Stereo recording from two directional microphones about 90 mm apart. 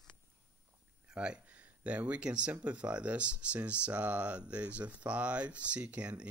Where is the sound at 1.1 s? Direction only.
10° right (ahead or behind).